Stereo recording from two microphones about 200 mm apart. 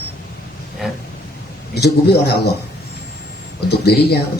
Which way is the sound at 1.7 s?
55° left (ahead or behind).